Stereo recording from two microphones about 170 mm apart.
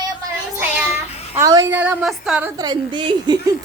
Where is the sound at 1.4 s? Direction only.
20° right (ahead or behind).